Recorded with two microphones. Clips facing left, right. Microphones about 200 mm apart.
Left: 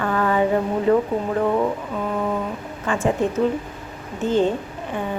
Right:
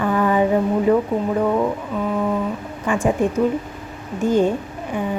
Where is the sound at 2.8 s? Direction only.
15° right (ahead or behind).